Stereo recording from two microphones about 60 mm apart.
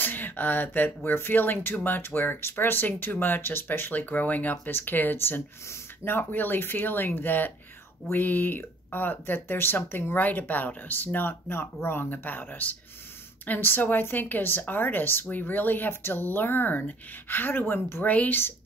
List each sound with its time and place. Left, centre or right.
0.0 s speech: left
18.0 s speech: left